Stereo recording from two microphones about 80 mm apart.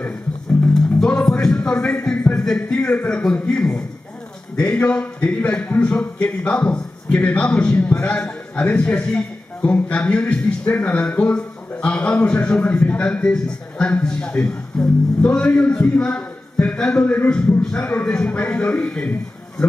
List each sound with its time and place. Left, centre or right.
0.7 s music: centre
2.3 s a man's voice: centre